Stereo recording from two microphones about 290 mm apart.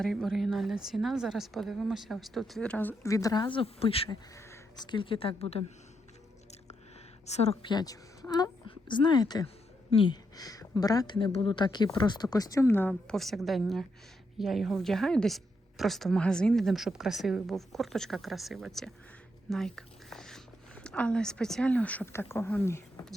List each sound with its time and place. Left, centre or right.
0.0 s a woman's voice: centre; by 5.6 s left
7.3 s a woman's voice: left; by 23.1 s centre